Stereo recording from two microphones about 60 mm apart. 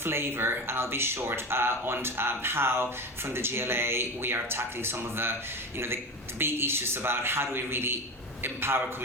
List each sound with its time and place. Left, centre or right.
0.0 s speech: right
6.4 s speech: right